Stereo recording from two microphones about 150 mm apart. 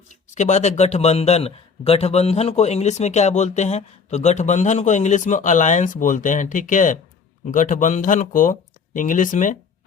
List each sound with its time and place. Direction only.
0.3 s a man's voice: 50° left (ahead or behind)